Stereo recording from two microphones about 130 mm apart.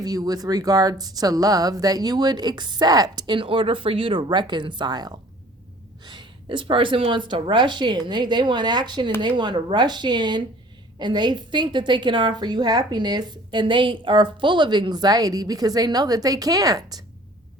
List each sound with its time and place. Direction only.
0.0 s a woman's voice: 30° right (ahead or behind)